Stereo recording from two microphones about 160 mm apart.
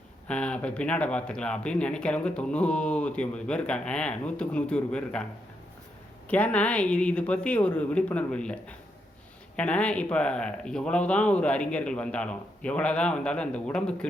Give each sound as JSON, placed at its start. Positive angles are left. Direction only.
{"t": 0.3, "sound": "speech", "side_deg": 5}
{"t": 6.2, "sound": "speech", "side_deg": 10}